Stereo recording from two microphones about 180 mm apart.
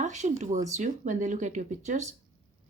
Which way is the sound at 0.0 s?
40° right (ahead or behind).